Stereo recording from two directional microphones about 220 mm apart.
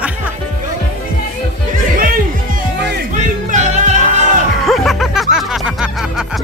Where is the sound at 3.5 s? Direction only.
35° right (ahead or behind).